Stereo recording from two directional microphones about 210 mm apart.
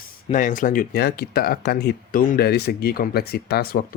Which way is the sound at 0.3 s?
35° left (ahead or behind).